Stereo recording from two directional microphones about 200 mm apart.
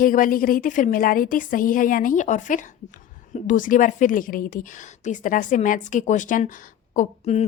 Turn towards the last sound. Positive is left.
turn(degrees=35)  # may be behind; listen again after turning